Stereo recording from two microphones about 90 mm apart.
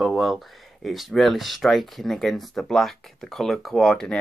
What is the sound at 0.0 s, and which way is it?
Speech, centre (ahead or behind).